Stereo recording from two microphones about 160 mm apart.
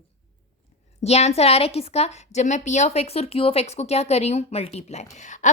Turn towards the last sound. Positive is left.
turn(degrees=50)  # may be behind; listen again after turning